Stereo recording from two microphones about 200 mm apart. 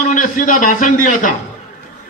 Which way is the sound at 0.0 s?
40° left (ahead or behind).